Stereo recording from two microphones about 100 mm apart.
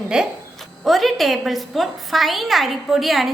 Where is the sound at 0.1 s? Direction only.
10° right (ahead or behind).